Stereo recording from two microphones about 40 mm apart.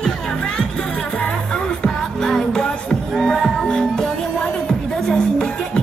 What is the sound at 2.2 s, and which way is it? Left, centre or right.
Music, centre.